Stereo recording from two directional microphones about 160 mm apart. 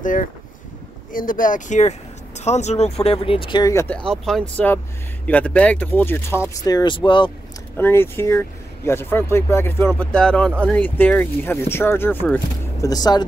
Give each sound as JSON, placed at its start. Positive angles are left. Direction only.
{"t": 0.0, "sound": "speech", "side_deg": 55}
{"t": 4.1, "sound": "speech", "side_deg": 5}
{"t": 6.5, "sound": "speech", "side_deg": 25}
{"t": 7.7, "sound": "speech", "side_deg": 15}
{"t": 12.8, "sound": "speech", "side_deg": 25}